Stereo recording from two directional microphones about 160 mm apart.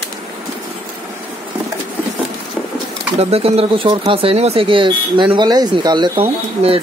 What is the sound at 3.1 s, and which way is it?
Speech, 40° right (ahead or behind).